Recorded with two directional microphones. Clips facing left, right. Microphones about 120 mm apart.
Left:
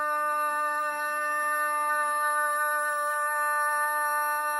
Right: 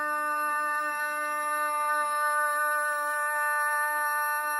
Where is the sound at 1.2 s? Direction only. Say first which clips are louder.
Left 1 dB; 15° right (ahead or behind).